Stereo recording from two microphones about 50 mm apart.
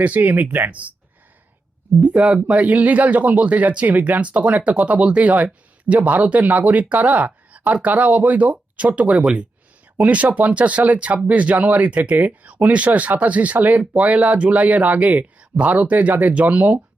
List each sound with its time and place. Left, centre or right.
0.0 s speech: right
0.7 s speech: right
2.2 s speech: right